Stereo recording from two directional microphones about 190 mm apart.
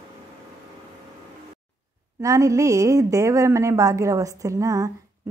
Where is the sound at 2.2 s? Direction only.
15° right (ahead or behind).